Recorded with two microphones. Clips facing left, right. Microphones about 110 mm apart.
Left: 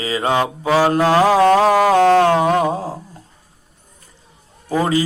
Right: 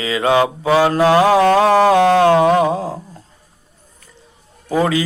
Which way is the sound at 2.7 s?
5° left (ahead or behind).